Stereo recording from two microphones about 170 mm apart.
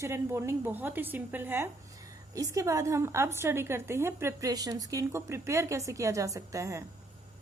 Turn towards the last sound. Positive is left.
turn(degrees=-20)  # may be behind; listen again after turning